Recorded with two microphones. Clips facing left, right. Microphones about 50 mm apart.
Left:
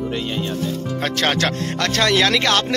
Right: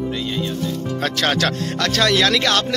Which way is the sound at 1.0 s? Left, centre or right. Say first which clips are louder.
Even; centre.